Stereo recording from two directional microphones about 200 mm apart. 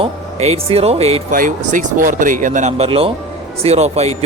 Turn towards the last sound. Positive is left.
turn(degrees=-30)  # may be behind; listen again after turning